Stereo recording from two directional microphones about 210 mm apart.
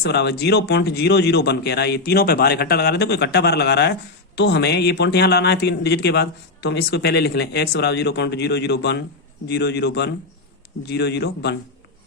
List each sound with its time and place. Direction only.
0.0 s speech: 50° left (ahead or behind)